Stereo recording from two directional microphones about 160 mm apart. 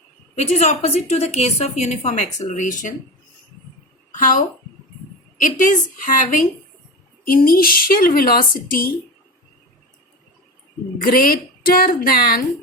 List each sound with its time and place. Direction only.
0.3 s a woman's voice: 45° left (ahead or behind)
4.2 s speech: 55° left (ahead or behind)
10.9 s speech: 65° left (ahead or behind)